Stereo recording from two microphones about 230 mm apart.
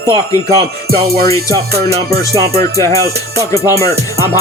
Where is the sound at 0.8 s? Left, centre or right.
Right.